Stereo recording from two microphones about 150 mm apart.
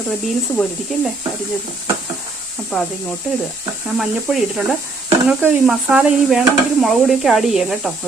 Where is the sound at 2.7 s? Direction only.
5° left (ahead or behind).